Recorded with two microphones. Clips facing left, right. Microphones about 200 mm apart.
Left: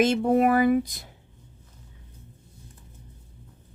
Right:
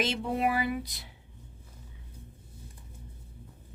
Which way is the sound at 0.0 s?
50° left (ahead or behind).